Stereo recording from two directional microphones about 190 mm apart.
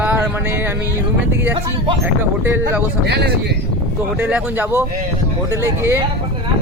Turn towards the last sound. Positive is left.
turn(degrees=-15)  # may be behind; listen again after turning